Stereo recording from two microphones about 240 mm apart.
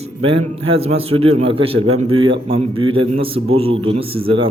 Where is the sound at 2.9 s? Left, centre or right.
Right.